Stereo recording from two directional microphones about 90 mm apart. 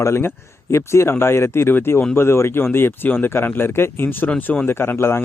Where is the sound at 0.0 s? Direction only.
25° left (ahead or behind).